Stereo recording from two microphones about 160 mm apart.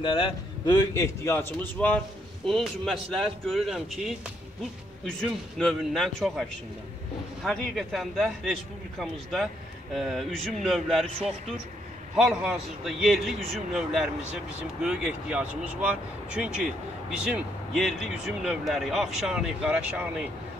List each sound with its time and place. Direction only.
0.0 s a man's voice: 30° left (ahead or behind); by 6.4 s centre (ahead or behind)
7.4 s a man's voice: centre (ahead or behind)
12.2 s a man's voice: 5° right (ahead or behind)